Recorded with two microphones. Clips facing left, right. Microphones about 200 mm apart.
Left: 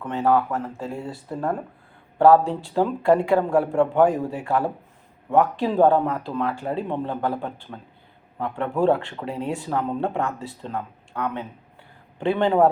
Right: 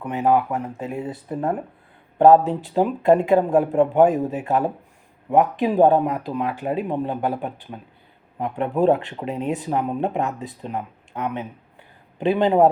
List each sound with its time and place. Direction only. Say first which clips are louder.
0.0 s speech: right 1 dB; 15° right (ahead or behind)